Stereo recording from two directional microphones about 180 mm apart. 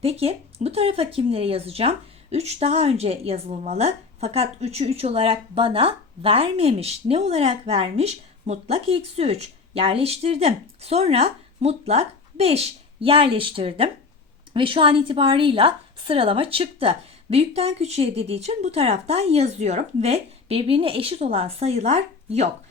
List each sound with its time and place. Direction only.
0.0 s speech: 35° right (ahead or behind)